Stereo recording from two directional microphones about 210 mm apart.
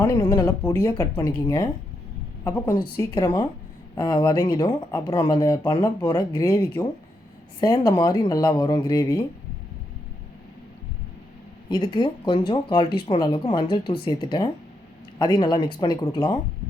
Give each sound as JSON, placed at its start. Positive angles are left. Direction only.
{"t": 0.0, "sound": "a woman's voice", "side_deg": 15}
{"t": 11.7, "sound": "speech", "side_deg": 20}